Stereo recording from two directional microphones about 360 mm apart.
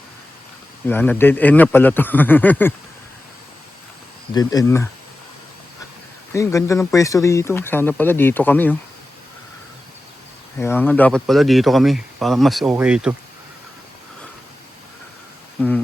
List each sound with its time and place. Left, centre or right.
0.9 s speech: centre
4.4 s speech: centre
6.3 s speech: centre
10.6 s speech: centre